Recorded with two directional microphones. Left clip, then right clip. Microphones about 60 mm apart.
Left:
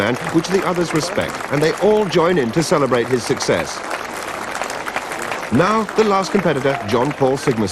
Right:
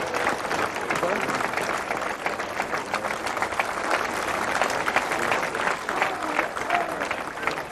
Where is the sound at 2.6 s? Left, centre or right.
Centre.